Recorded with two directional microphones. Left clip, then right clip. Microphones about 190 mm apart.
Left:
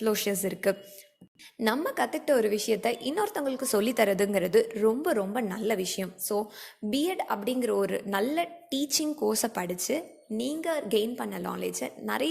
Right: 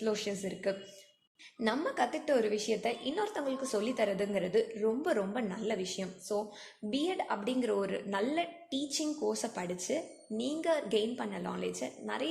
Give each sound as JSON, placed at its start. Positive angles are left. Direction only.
{"t": 0.0, "sound": "a woman's voice", "side_deg": 35}
{"t": 5.0, "sound": "a woman's voice", "side_deg": 25}